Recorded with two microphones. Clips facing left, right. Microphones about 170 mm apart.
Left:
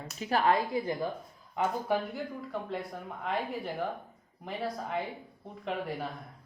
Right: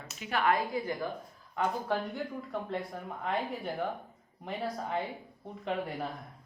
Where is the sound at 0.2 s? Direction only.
35° left (ahead or behind).